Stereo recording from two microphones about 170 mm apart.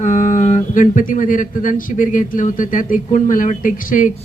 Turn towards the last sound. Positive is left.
turn(degrees=55)  # may be behind; listen again after turning